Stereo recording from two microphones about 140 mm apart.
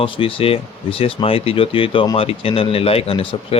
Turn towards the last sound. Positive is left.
turn(degrees=45)  # may be behind; listen again after turning